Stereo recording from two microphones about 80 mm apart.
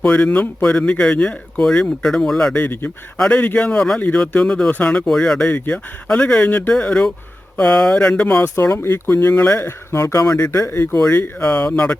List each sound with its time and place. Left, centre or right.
0.0 s speech: centre
2.6 s speech: left
5.0 s speech: centre
5.5 s speech: left
5.7 s speech: centre
8.7 s speech: left
11.3 s speech: centre